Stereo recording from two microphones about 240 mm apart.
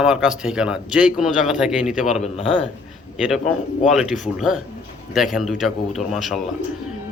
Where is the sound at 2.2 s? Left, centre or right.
Left.